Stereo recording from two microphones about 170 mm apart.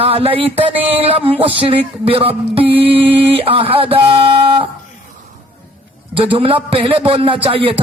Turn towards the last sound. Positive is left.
turn(degrees=-35)  # may be behind; listen again after turning